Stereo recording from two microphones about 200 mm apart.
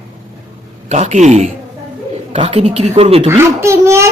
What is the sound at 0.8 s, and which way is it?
Speech, 35° right (ahead or behind).